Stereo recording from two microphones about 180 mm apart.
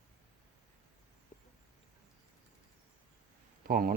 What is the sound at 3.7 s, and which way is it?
Speech, 55° right (ahead or behind).